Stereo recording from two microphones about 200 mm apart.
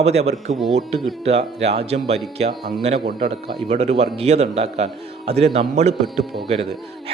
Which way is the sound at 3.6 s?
30° right (ahead or behind).